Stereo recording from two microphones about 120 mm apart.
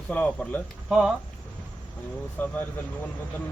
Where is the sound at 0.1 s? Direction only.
10° left (ahead or behind).